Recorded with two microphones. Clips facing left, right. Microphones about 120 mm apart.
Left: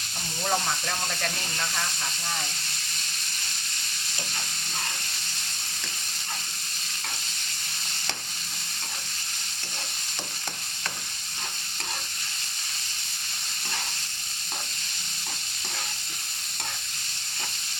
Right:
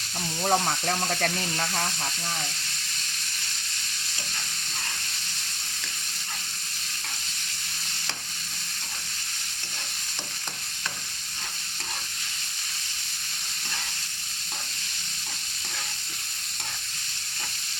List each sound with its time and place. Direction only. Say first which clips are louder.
0.4 s speech: right 4 dB; 55° right (ahead or behind)